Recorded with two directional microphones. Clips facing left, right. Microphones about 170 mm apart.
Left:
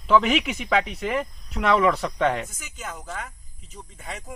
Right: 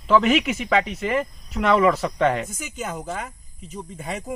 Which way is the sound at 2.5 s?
15° right (ahead or behind).